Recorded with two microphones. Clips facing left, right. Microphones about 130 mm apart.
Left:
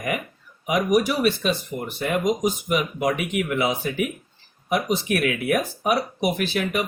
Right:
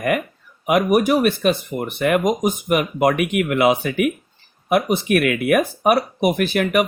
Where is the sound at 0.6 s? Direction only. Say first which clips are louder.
Right 4 dB; 60° right (ahead or behind).